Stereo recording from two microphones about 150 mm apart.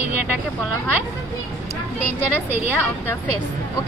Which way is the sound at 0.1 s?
10° right (ahead or behind).